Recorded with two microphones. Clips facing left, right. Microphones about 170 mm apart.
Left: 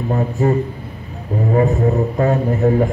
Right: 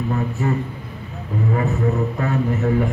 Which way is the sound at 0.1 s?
35° left (ahead or behind).